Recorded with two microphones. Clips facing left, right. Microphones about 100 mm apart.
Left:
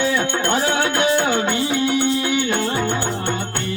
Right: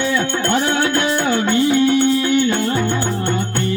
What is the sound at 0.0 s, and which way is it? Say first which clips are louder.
Music: right 1 dB; 15° left (ahead or behind).